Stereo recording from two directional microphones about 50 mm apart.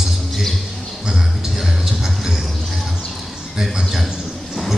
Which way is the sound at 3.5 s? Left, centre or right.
Centre.